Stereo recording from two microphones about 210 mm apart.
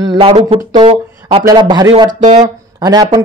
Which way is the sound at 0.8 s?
25° right (ahead or behind).